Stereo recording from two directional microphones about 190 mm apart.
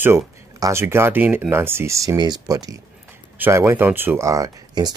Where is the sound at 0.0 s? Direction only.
15° right (ahead or behind).